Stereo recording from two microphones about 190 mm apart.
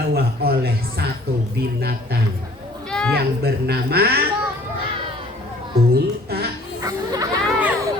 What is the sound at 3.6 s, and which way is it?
Speech, 55° right (ahead or behind).